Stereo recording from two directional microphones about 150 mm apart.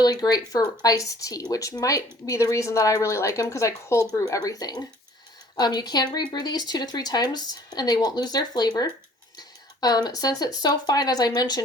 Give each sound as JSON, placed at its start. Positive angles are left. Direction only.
{"t": 0.0, "sound": "speech", "side_deg": 25}